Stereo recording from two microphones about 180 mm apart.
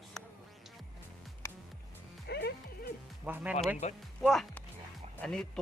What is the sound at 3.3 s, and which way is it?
Speech, 10° right (ahead or behind).